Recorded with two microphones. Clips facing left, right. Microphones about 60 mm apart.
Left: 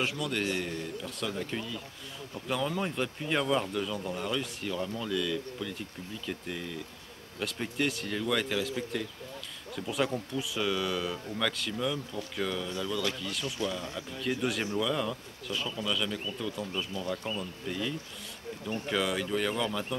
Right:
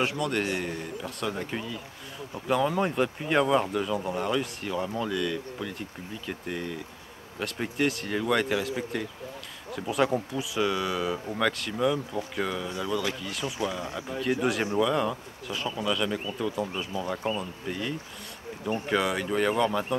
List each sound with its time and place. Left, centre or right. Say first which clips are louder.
0.0 s speech: right 4 dB; centre
0.4 s speech: right 3 dB; centre
4.6 s speech: right 4 dB; centre
18.7 s speech: right 6 dB; right
18.9 s speech: right 3 dB; centre
19.2 s speech: right 5 dB; centre